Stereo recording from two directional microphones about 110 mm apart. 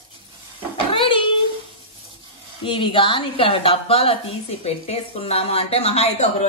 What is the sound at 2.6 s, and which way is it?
Speech, 50° left (ahead or behind).